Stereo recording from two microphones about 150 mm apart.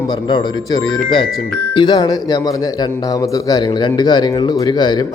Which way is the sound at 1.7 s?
30° left (ahead or behind).